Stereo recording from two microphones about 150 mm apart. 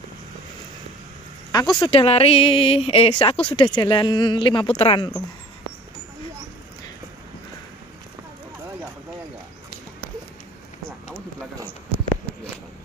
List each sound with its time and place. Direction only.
1.5 s speech: 30° left (ahead or behind)